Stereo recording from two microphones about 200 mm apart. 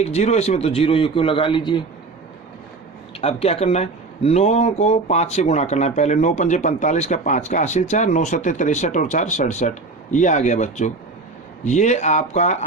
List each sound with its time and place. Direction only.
0.0 s speech: 35° left (ahead or behind)
3.2 s speech: 30° left (ahead or behind)